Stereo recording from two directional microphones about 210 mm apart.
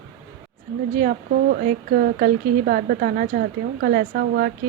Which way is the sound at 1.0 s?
45° right (ahead or behind).